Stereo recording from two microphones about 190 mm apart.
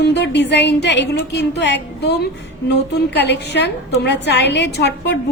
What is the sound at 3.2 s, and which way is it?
A woman's voice, 65° left (ahead or behind).